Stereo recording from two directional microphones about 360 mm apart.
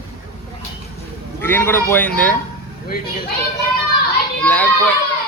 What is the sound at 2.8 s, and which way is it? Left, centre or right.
Speech, left.